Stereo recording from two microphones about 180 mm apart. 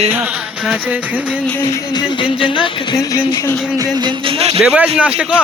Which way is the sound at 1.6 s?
30° left (ahead or behind).